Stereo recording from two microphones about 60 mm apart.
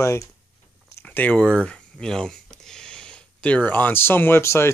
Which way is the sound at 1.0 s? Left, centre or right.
Left.